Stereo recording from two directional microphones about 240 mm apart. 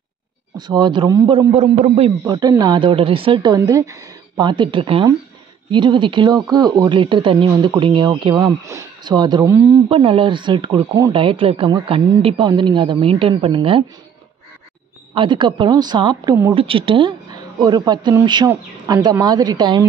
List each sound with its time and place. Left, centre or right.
0.6 s a man's voice: centre
9.8 s a man's voice: right
15.1 s a man's voice: centre